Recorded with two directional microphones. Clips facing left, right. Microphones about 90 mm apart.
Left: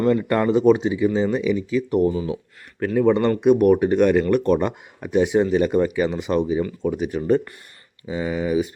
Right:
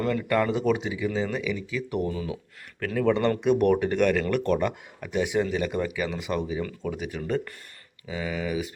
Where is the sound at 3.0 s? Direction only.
20° left (ahead or behind).